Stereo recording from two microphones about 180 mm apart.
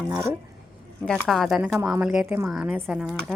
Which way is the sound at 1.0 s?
Centre (ahead or behind).